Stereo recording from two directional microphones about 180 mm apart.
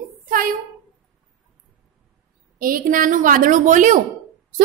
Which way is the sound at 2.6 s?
50° right (ahead or behind).